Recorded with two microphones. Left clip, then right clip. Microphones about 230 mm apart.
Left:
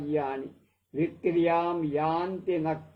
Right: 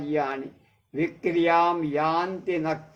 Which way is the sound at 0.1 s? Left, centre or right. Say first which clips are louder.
Right 3 dB; right.